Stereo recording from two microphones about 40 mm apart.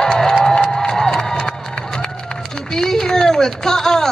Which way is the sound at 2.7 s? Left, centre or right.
Centre.